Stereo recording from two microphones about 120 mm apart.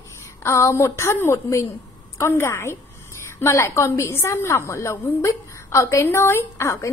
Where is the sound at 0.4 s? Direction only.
25° left (ahead or behind).